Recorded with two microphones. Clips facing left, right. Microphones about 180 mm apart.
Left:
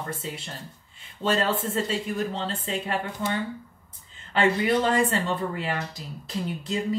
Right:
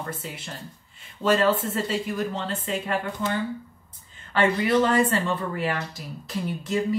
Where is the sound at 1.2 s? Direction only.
30° left (ahead or behind).